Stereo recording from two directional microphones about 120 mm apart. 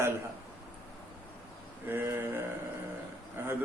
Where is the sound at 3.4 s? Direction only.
20° right (ahead or behind).